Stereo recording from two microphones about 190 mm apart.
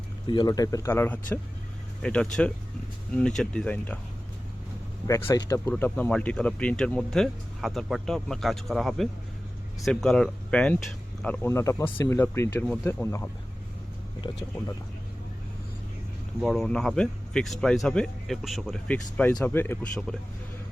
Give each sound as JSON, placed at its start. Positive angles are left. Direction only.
{"t": 0.3, "sound": "speech", "side_deg": 20}
{"t": 5.0, "sound": "speech", "side_deg": 15}
{"t": 14.3, "sound": "speech", "side_deg": 25}
{"t": 16.4, "sound": "speech", "side_deg": 0}